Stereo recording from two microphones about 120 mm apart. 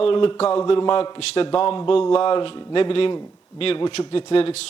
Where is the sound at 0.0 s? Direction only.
45° left (ahead or behind).